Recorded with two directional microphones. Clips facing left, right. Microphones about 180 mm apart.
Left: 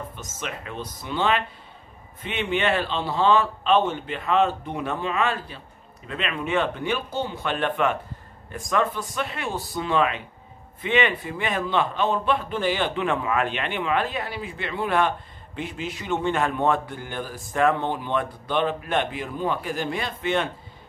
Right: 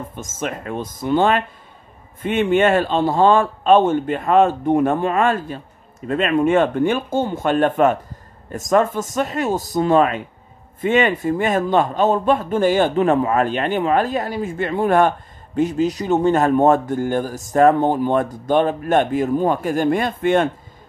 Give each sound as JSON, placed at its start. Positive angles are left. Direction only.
{"t": 0.0, "sound": "a man's voice", "side_deg": -45}